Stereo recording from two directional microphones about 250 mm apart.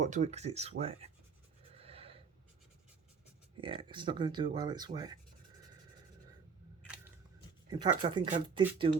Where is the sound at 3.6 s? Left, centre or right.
Centre.